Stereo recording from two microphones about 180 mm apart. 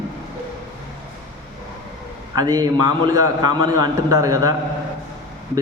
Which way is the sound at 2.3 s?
20° right (ahead or behind).